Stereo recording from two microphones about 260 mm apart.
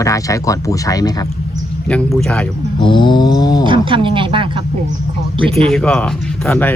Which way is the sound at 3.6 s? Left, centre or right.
Centre.